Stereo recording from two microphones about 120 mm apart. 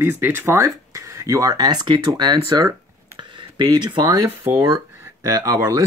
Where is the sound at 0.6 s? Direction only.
25° right (ahead or behind).